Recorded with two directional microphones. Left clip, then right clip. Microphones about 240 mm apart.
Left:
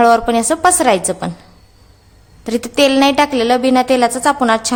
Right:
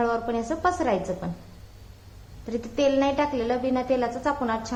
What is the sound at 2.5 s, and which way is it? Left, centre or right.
A woman's voice, left.